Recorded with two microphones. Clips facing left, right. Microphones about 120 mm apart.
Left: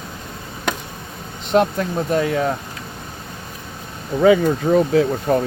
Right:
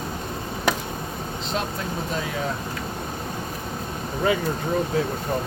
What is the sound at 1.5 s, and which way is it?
Speech, 60° left (ahead or behind).